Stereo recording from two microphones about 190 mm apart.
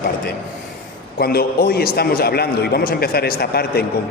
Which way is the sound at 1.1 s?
55° left (ahead or behind).